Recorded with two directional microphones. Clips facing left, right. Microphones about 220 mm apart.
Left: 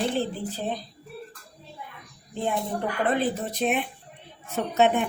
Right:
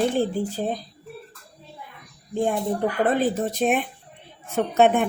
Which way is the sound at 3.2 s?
45° right (ahead or behind).